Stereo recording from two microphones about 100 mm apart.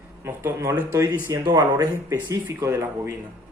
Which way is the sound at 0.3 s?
25° right (ahead or behind).